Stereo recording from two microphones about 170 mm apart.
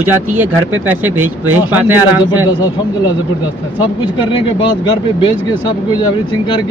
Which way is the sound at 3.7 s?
25° left (ahead or behind).